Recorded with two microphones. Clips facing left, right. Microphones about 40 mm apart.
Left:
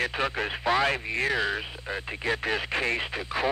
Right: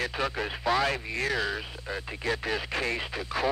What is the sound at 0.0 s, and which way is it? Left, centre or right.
Speech, left.